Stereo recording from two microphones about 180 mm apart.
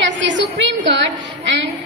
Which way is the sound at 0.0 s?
90° right.